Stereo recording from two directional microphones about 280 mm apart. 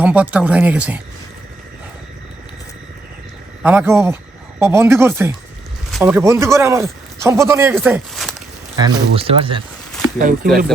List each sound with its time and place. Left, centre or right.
0.0 s speech: centre
3.6 s speech: centre
8.8 s speech: centre